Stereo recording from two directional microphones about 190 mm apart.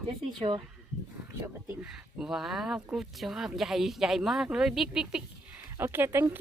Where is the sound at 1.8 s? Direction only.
5° right (ahead or behind).